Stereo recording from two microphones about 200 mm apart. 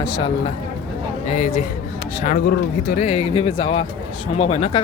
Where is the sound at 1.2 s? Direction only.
40° left (ahead or behind).